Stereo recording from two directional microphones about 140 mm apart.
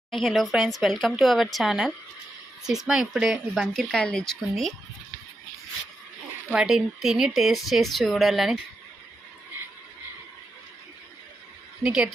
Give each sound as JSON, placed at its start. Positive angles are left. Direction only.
{"t": 0.1, "sound": "a woman's voice", "side_deg": 0}
{"t": 6.5, "sound": "a woman's voice", "side_deg": -5}
{"t": 11.8, "sound": "a woman's voice", "side_deg": -5}